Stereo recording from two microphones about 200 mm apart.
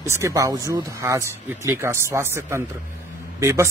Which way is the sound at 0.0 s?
15° right (ahead or behind).